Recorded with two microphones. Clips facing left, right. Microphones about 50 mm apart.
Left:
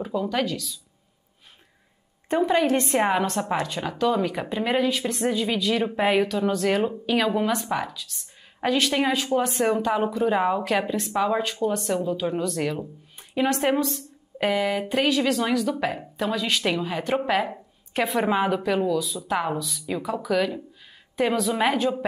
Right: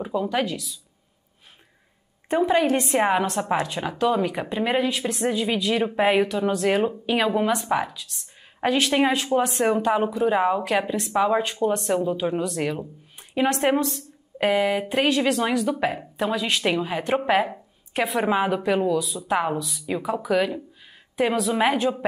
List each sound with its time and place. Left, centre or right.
0.0 s speech: centre
2.2 s a woman's voice: centre
4.4 s speech: centre
7.7 s speech: centre
11.5 s speech: right
12.0 s a woman's voice: centre
17.5 s a woman's voice: centre